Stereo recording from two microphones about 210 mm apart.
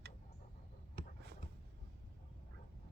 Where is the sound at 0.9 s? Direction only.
50° right (ahead or behind).